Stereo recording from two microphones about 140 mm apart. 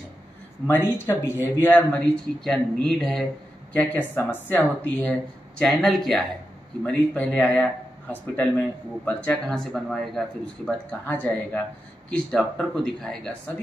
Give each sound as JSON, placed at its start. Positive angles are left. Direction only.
{"t": 0.7, "sound": "speech", "side_deg": 15}
{"t": 1.9, "sound": "speech", "side_deg": 5}